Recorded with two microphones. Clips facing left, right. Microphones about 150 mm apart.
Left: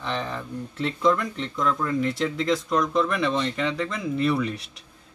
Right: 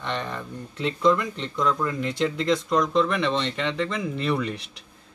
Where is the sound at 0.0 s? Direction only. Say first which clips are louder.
Left 1 dB; centre (ahead or behind).